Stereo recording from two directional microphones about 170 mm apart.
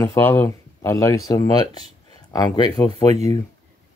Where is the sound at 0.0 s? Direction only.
15° left (ahead or behind).